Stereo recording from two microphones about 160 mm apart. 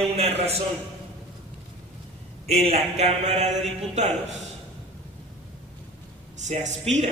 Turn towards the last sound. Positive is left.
turn(degrees=-45)  # may be behind; listen again after turning